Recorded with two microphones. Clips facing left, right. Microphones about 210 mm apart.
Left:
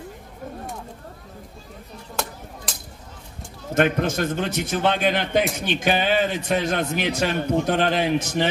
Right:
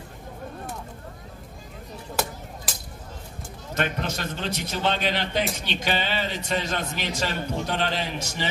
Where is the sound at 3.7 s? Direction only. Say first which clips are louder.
Left 8 dB; 50° left (ahead or behind).